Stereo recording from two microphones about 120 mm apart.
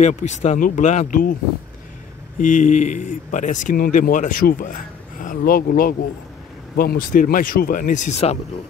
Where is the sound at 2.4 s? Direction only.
90° left.